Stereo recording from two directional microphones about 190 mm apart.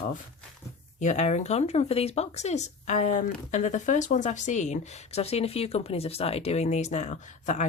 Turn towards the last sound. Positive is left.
turn(degrees=40)  # may be behind; listen again after turning